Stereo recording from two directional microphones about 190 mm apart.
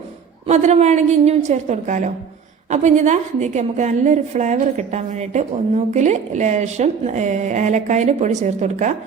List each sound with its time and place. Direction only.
0.4 s a woman's voice: 35° right (ahead or behind)